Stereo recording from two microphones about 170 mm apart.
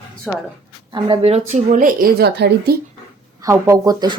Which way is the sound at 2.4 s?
80° right.